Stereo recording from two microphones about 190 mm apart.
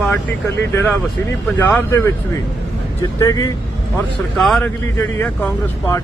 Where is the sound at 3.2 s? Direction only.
20° left (ahead or behind).